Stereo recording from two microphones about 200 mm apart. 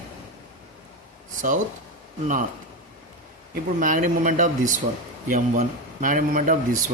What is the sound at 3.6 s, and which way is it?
Speech, 40° right (ahead or behind).